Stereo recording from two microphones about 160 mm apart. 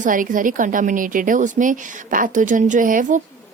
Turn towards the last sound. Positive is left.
turn(degrees=-55)  # may be behind; listen again after turning